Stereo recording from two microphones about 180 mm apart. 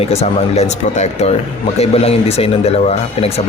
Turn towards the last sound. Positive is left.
turn(degrees=35)  # may be behind; listen again after turning